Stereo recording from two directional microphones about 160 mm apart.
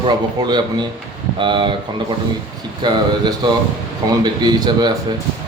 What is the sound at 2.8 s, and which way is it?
A man's voice, 25° right (ahead or behind).